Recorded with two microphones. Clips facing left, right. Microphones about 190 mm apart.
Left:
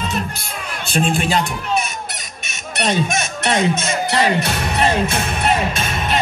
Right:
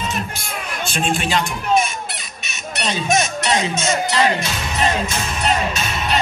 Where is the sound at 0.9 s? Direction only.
40° left (ahead or behind).